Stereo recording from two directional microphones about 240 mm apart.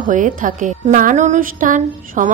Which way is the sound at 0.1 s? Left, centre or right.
Right.